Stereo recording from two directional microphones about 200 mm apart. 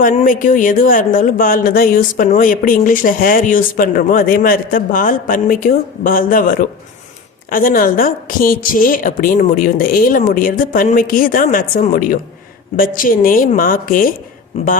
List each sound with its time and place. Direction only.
0.0 s speech: 40° left (ahead or behind)
14.5 s speech: 35° left (ahead or behind)